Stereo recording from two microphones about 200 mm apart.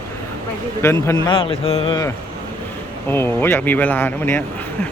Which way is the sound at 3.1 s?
10° left (ahead or behind).